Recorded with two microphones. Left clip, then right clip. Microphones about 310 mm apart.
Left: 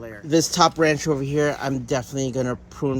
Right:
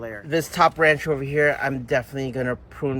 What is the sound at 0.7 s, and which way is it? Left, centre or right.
Speech, centre.